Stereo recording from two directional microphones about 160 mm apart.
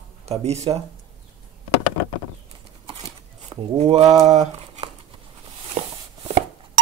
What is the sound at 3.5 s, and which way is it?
Speech, 40° right (ahead or behind).